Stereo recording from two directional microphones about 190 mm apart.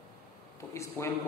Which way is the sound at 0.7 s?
15° left (ahead or behind).